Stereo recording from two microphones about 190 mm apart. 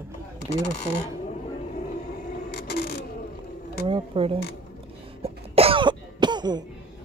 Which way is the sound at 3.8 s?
30° right (ahead or behind).